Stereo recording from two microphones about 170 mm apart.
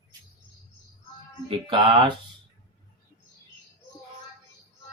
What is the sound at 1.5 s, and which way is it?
Speech, 30° right (ahead or behind).